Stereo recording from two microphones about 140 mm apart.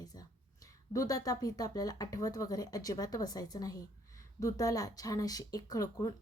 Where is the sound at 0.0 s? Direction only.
25° left (ahead or behind).